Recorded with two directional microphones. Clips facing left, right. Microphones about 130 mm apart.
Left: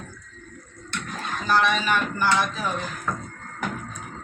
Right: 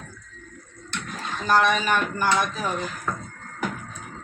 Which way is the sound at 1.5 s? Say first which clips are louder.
Right 2 dB; 45° right (ahead or behind).